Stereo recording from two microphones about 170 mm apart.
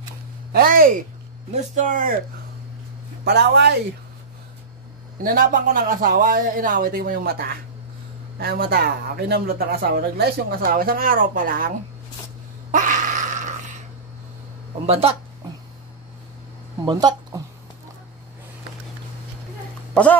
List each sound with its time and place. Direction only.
0.5 s a man's voice: 60° right (ahead or behind)
3.3 s speech: 75° right (ahead or behind)
5.2 s a man's voice: 55° right (ahead or behind)
12.7 s a sound: 50° right (ahead or behind)
14.9 s speech: 35° right (ahead or behind)
16.8 s speech: 25° right (ahead or behind)
19.9 s speech: 5° left (ahead or behind)